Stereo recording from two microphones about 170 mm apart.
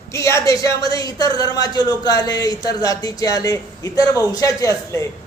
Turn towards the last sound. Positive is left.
turn(degrees=20)  # may be behind; listen again after turning